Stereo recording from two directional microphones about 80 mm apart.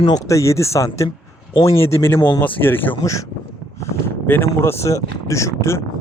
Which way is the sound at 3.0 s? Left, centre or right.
Left.